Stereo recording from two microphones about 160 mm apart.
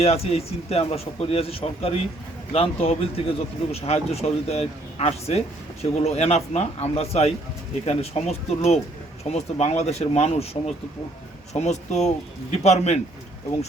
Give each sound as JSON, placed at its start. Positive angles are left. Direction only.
{"t": 0.0, "sound": "speech", "side_deg": 40}